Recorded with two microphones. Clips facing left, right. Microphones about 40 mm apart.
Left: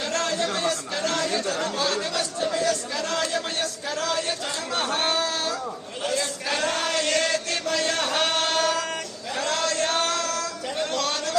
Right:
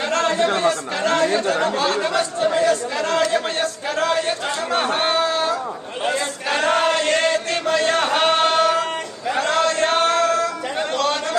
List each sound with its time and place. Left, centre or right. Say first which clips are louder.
0.1 s speech: right 8 dB; right
6.1 s chant: right 4 dB; right
9.3 s music: right 7 dB; right
10.9 s chatter: right 8 dB; right